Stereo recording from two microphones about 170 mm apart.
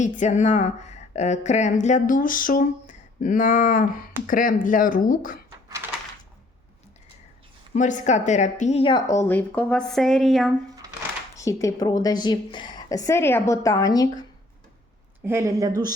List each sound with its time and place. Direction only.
0.0 s speech: 45° left (ahead or behind)
7.7 s a woman's voice: 45° left (ahead or behind); by 10.5 s centre (ahead or behind)
11.3 s a woman's voice: 20° left (ahead or behind)
15.2 s speech: 15° right (ahead or behind)